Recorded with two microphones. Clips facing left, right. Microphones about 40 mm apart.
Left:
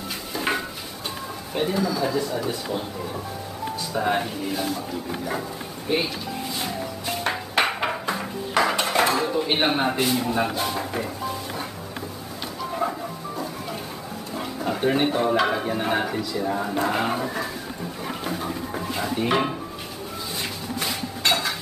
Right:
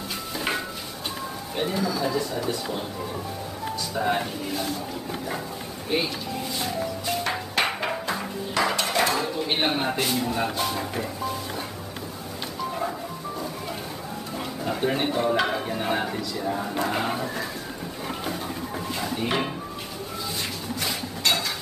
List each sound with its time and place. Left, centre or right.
0.4 s a sound: centre
1.5 s speech: centre
3.9 s speech: centre
5.9 s speech: centre
7.6 s a sound: centre
8.7 s dishes: centre
9.1 s speech: centre
14.6 s speech: centre
18.0 s a sound: centre
18.9 s speech: centre